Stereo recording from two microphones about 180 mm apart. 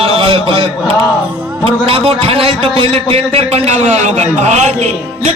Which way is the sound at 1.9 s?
30° right (ahead or behind).